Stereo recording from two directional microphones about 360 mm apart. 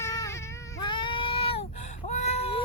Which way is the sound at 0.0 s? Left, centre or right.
Centre.